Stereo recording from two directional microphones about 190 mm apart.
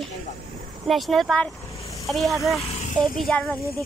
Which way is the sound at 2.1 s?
Centre (ahead or behind).